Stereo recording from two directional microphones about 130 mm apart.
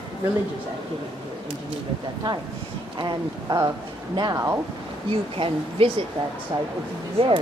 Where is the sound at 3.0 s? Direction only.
35° right (ahead or behind).